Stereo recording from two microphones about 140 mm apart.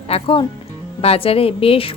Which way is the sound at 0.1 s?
40° left (ahead or behind).